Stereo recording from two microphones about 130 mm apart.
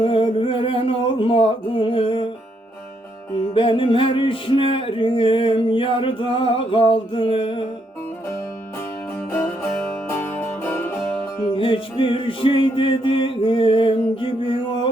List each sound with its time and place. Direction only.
0.0 s a sound: 45° left (ahead or behind)
3.5 s music: 40° left (ahead or behind)
10.1 s music: 15° left (ahead or behind)
11.5 s music: 45° left (ahead or behind)